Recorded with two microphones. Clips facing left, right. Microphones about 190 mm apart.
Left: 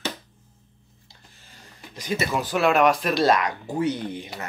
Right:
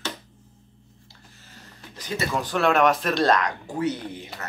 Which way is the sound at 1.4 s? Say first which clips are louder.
Even; 15° left (ahead or behind).